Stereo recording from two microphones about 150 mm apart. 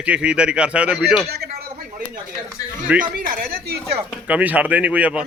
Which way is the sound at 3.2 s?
70° right (ahead or behind).